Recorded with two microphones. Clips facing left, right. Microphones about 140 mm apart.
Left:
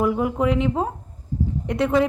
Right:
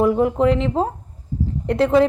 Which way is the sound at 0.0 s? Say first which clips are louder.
Right 4 dB; 25° right (ahead or behind).